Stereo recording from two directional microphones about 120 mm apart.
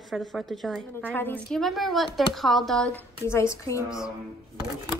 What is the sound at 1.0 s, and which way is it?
Speech, 15° left (ahead or behind).